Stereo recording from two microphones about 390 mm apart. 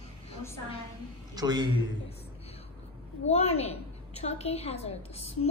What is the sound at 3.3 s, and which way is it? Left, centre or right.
A woman's voice, centre.